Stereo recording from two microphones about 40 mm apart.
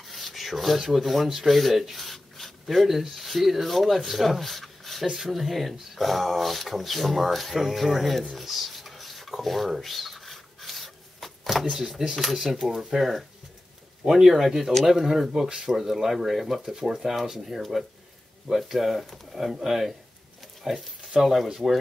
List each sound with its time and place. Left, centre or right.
0.1 s rub: centre
1.4 s speech: centre
5.0 s speech: centre
8.4 s dishes: centre
9.4 s rub: centre
12.2 s speech: centre
15.7 s speech: centre
20.6 s a sound: centre
21.2 s speech: centre